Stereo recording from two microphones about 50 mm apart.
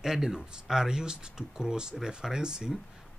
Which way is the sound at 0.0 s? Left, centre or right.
Centre.